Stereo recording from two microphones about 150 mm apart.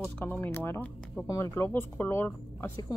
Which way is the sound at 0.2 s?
15° left (ahead or behind).